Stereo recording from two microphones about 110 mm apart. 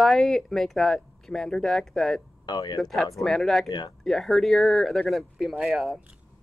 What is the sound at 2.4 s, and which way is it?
Speech, 40° left (ahead or behind).